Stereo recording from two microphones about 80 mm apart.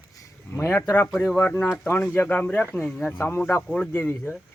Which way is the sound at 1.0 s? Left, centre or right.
Left.